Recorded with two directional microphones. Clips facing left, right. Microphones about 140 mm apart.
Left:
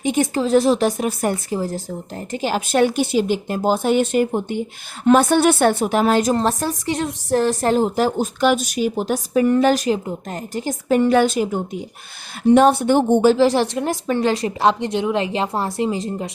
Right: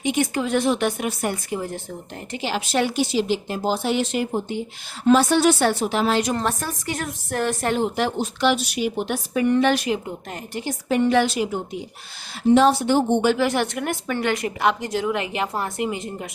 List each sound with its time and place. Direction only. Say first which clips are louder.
0.0 s a woman's voice: left 3 dB; 45° left (ahead or behind)
13.2 s a woman's voice: left 6 dB; 30° left (ahead or behind)